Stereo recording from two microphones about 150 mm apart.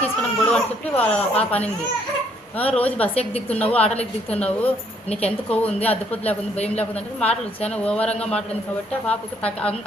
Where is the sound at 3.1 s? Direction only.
40° left (ahead or behind).